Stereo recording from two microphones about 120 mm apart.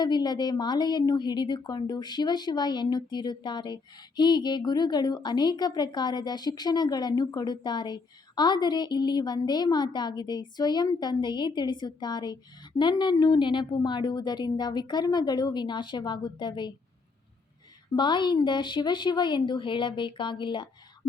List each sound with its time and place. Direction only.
0.0 s a woman's voice: 35° left (ahead or behind)
17.9 s a woman's voice: 40° left (ahead or behind)